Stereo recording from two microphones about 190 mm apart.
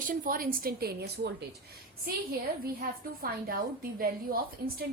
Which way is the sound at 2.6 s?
50° right (ahead or behind).